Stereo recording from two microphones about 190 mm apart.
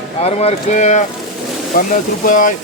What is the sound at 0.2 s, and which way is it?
Speech, 35° left (ahead or behind).